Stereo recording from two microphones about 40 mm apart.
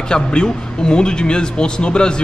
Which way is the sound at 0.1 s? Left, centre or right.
Left.